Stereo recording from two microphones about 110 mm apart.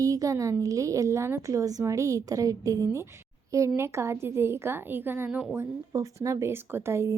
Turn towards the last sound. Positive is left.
turn(degrees=-25)  # may be behind; listen again after turning